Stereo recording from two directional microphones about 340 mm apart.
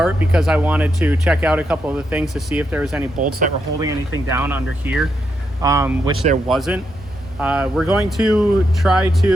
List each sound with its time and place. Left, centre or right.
0.0 s speech: centre
3.2 s speech: right
3.8 s speech: centre